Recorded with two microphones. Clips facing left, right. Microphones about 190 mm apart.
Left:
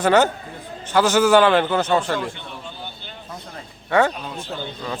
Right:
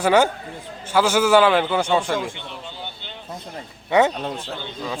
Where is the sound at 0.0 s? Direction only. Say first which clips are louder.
Even; 10° right (ahead or behind).